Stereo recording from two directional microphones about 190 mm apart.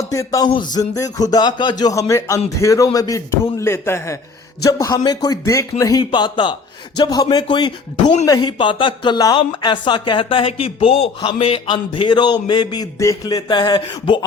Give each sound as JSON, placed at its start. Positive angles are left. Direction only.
{"t": 0.1, "sound": "a man's voice", "side_deg": 20}